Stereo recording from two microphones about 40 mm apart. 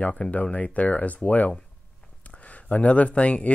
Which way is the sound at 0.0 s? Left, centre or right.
Left.